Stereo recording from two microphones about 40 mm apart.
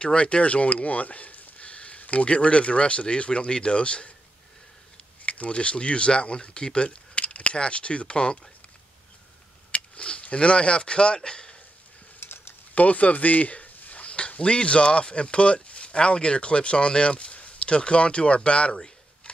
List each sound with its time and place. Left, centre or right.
0.0 s speech: left
5.2 s speech: left
9.7 s speech: left
12.2 s typing: left
12.7 s speech: left